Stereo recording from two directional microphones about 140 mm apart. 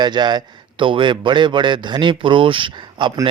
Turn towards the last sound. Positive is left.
turn(degrees=-35)  # may be behind; listen again after turning